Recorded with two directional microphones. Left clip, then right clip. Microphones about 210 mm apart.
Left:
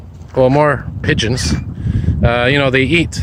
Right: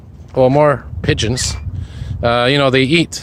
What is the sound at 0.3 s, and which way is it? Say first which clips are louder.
Speech: even; 15° right (ahead or behind).